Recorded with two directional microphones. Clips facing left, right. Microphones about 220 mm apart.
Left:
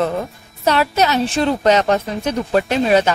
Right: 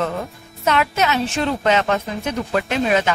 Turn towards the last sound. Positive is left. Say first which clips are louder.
# left 4 dB
turn(degrees=35)  # may be behind; listen again after turning